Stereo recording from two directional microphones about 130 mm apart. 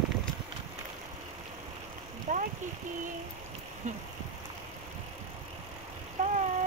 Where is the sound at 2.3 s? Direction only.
80° right.